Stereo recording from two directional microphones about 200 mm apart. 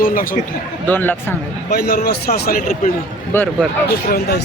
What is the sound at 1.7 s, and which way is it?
Speech, 50° left (ahead or behind).